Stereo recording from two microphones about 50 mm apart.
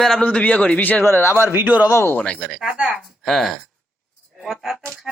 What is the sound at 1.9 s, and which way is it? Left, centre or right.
Speech, left.